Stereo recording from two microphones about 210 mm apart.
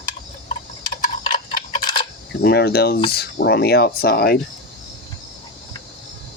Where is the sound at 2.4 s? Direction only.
50° left (ahead or behind).